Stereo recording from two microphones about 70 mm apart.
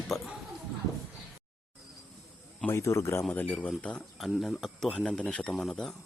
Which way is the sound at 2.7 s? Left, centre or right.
Left.